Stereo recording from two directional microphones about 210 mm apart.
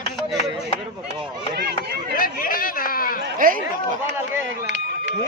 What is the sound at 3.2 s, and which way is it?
Speech, 40° right (ahead or behind).